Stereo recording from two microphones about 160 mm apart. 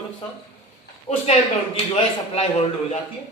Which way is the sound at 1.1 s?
45° left (ahead or behind).